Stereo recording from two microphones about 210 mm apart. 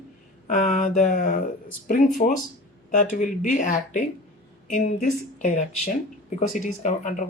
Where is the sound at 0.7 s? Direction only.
35° left (ahead or behind).